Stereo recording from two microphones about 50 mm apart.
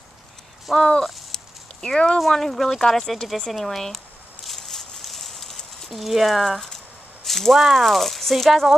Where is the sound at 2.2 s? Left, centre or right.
Centre.